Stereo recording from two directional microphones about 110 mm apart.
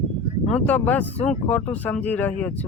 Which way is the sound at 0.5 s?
10° left (ahead or behind).